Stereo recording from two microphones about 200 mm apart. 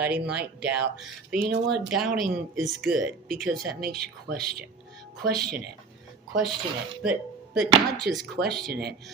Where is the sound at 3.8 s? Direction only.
50° right (ahead or behind).